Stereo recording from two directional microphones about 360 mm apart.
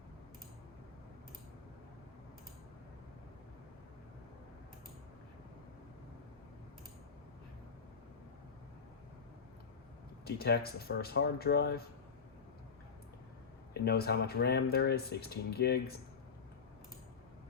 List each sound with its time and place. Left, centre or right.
10.2 s speech: left
13.8 s speech: left